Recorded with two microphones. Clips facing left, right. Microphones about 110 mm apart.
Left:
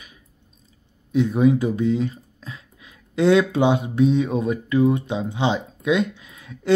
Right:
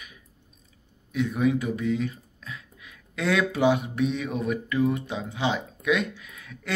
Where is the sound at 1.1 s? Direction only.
30° left (ahead or behind).